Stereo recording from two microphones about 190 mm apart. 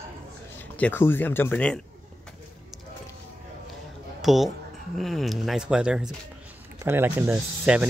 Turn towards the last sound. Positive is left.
turn(degrees=-5)  # may be behind; listen again after turning